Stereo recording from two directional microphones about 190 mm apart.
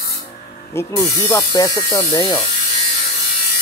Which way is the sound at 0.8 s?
20° left (ahead or behind).